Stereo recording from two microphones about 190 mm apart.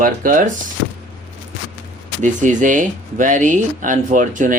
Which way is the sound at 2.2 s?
40° right (ahead or behind).